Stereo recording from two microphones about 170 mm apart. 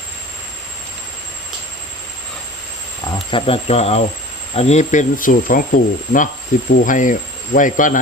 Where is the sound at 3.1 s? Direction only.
30° left (ahead or behind); by 8.0 s 50° left (ahead or behind).